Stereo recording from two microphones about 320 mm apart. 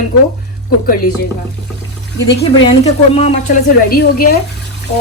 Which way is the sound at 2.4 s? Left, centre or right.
Centre.